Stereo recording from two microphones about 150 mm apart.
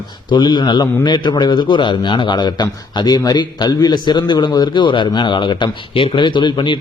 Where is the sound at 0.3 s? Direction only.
30° left (ahead or behind).